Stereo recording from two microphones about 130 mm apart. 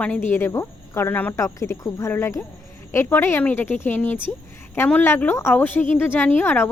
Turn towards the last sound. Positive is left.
turn(degrees=15)  # may be behind; listen again after turning